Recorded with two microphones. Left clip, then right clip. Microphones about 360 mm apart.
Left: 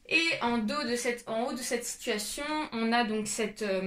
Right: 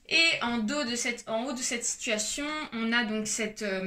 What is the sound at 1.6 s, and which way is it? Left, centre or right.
Speech, centre.